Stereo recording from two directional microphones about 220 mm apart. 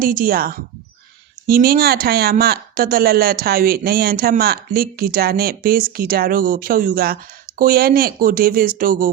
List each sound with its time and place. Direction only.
0.0 s a woman's voice: 40° right (ahead or behind)